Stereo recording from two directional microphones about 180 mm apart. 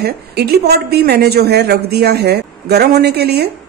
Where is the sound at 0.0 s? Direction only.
65° right (ahead or behind).